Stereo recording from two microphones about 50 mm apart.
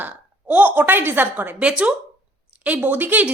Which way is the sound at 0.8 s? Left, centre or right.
Right.